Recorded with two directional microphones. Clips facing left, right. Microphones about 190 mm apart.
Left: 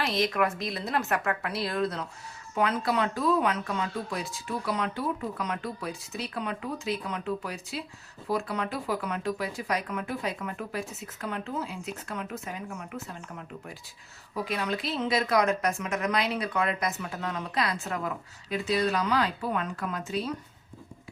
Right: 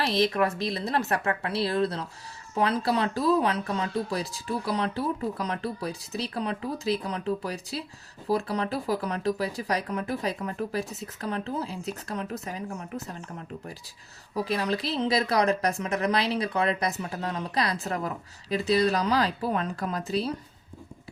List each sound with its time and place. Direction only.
0.0 s a woman's voice: 30° right (ahead or behind)
14.3 s a woman's voice: 35° right (ahead or behind)